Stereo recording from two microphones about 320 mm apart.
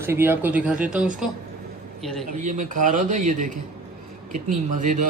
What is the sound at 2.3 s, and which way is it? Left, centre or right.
A man's voice, right.